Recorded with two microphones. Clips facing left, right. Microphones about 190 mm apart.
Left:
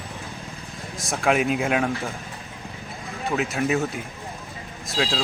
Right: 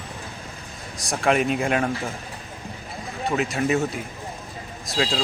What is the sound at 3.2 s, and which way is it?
Speech, centre (ahead or behind).